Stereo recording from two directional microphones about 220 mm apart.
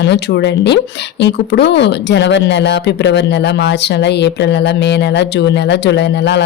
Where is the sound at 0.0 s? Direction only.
50° left (ahead or behind).